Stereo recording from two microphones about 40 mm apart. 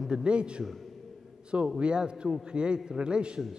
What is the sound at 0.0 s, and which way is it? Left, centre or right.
Speech, right.